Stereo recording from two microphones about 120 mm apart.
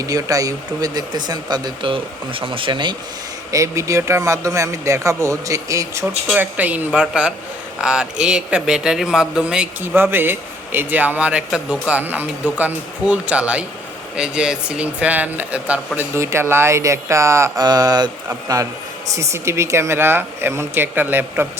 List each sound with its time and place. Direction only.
0.0 s speech: 30° right (ahead or behind)
3.5 s speech: 25° right (ahead or behind)
6.3 s speech: 15° right (ahead or behind)
16.0 s speech: 20° right (ahead or behind)